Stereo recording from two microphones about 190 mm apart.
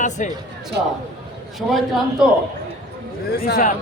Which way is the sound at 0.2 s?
40° left (ahead or behind).